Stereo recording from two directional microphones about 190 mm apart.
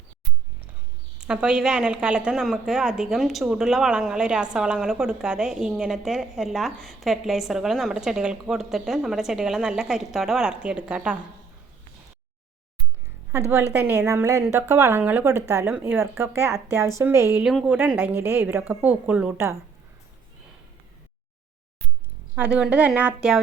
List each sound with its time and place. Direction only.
1.2 s a woman's voice: 5° right (ahead or behind)
13.7 s speech: 10° right (ahead or behind)
17.4 s speech: 5° right (ahead or behind)
22.4 s speech: 5° right (ahead or behind)